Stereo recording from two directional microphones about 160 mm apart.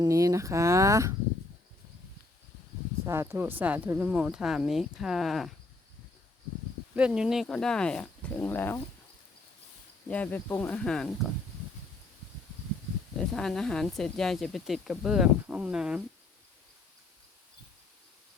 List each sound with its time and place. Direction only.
0.0 s speech: 20° right (ahead or behind)
3.1 s speech: 15° right (ahead or behind)
6.9 s speech: 5° right (ahead or behind); by 8.8 s 15° left (ahead or behind)
10.1 s speech: 10° left (ahead or behind)
13.1 s speech: 5° left (ahead or behind)